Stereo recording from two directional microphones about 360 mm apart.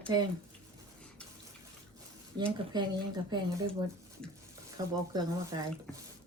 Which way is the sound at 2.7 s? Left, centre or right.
Centre.